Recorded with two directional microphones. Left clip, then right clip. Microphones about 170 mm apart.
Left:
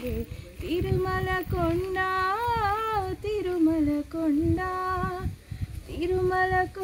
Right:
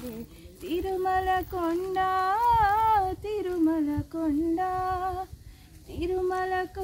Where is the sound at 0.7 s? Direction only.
5° left (ahead or behind).